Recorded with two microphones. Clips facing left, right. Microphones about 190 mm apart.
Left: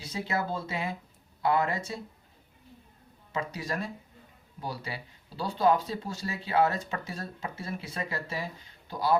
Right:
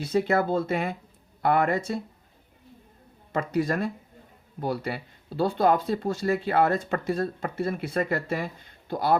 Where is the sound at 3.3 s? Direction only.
55° right (ahead or behind).